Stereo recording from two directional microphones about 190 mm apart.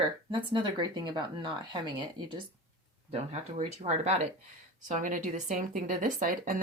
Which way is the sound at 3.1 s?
35° right (ahead or behind).